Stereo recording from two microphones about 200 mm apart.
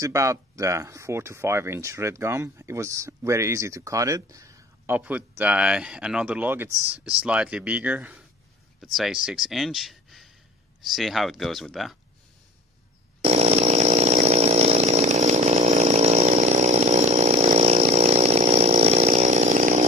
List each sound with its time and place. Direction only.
0.0 s speech: 15° right (ahead or behind)
13.2 s chainsaw: 30° right (ahead or behind)